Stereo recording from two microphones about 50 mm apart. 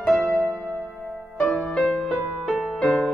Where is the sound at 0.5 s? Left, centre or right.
Centre.